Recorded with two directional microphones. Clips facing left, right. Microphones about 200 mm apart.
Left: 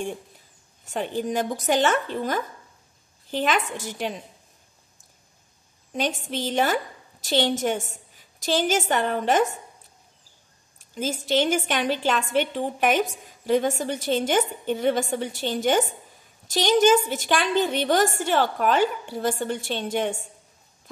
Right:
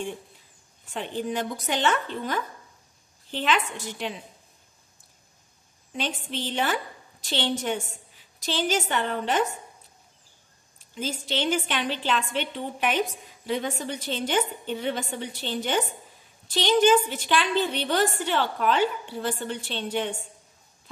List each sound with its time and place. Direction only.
0.8 s a woman's voice: 45° left (ahead or behind)
5.9 s a woman's voice: 45° left (ahead or behind)
11.0 s a woman's voice: 45° left (ahead or behind)